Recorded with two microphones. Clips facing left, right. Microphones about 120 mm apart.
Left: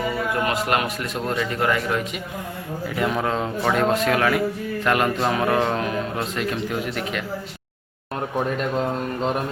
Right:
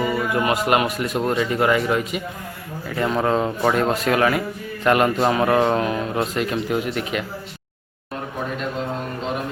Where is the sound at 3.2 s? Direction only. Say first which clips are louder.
Right 3 dB; 5° right (ahead or behind).